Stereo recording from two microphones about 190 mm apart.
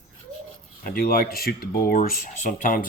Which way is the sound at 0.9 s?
50° left (ahead or behind).